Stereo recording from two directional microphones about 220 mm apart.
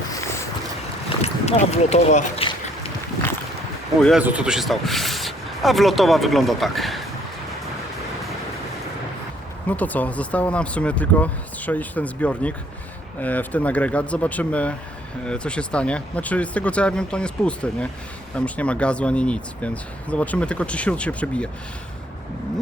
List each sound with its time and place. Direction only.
1.2 s a sound: 30° left (ahead or behind)
4.0 s speech: 5° right (ahead or behind)
9.6 s speech: 5° left (ahead or behind)